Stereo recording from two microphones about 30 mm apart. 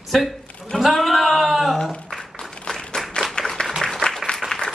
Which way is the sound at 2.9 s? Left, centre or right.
Left.